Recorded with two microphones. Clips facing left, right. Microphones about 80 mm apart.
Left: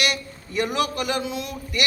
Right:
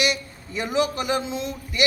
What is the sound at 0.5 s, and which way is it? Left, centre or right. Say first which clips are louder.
A man's voice: even; right.